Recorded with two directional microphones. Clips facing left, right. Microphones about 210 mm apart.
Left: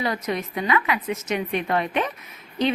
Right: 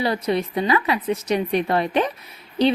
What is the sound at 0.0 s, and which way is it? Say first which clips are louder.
A woman's voice: right 4 dB; 30° right (ahead or behind).